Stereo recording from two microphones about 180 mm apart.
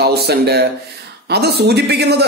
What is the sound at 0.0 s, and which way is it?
Speech, 65° right (ahead or behind).